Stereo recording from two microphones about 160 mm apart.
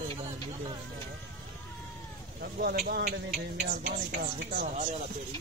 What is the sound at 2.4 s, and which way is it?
Speech, 75° right (ahead or behind).